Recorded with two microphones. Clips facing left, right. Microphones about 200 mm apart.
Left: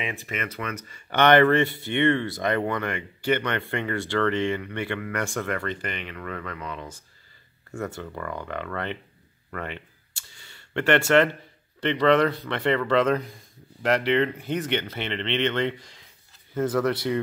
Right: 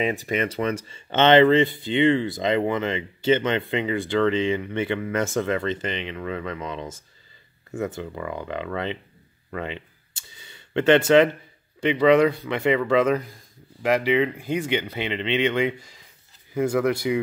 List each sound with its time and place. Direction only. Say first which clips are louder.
0.0 s speech: right 8 dB; 40° right (ahead or behind); by 9.8 s 15° right (ahead or behind)
10.4 s a sound: right 5 dB; 20° right (ahead or behind)
11.8 s speech: right 3 dB; 10° right (ahead or behind)